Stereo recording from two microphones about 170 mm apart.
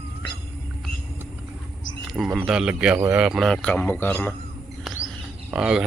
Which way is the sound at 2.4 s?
5° right (ahead or behind).